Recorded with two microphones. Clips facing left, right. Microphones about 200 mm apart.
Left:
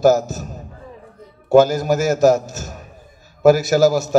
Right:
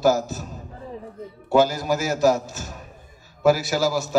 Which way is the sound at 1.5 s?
45° left (ahead or behind).